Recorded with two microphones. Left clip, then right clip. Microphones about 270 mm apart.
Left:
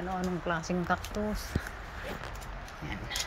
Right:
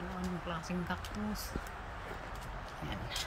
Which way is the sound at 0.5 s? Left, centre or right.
Centre.